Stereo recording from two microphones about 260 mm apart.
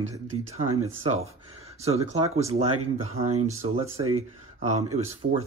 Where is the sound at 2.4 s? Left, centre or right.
Right.